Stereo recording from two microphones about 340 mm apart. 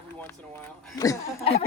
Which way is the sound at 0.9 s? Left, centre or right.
Centre.